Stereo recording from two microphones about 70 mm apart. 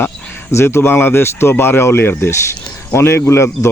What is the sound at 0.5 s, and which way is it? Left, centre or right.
Speech, left.